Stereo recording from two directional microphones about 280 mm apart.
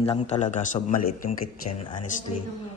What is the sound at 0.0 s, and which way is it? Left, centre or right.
Speech, left.